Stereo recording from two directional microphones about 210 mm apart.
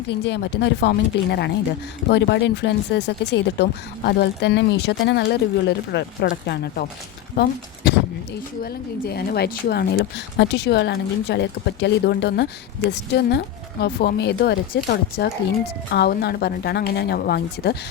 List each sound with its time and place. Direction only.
0.1 s speech: 55° left (ahead or behind)
8.6 s speech: 50° left (ahead or behind)